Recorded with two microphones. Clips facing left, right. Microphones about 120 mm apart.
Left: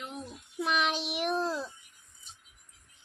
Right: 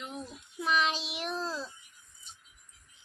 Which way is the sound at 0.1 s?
Centre (ahead or behind).